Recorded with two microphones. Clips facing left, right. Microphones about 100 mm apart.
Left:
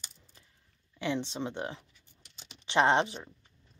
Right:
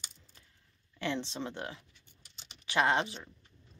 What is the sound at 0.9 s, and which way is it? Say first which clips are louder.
Speech: left 2 dB; 15° left (ahead or behind).